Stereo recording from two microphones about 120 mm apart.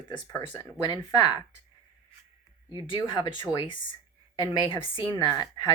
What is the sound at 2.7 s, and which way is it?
Speech, 40° left (ahead or behind).